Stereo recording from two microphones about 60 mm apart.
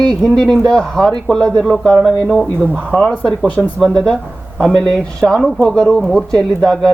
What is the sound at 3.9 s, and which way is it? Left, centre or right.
Speech, centre.